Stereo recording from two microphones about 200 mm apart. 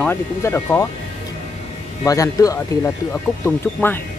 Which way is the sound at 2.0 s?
15° left (ahead or behind).